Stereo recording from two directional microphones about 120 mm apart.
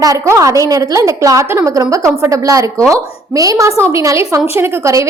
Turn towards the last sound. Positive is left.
turn(degrees=-25)  # may be behind; listen again after turning